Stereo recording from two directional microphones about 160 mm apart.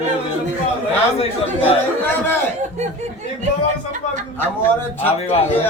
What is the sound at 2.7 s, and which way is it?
Speech, 45° right (ahead or behind).